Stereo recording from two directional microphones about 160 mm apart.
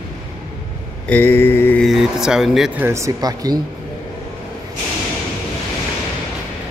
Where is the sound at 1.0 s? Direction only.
10° left (ahead or behind).